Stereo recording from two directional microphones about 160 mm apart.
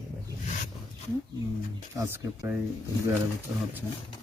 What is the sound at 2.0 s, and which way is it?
Speech, 15° right (ahead or behind).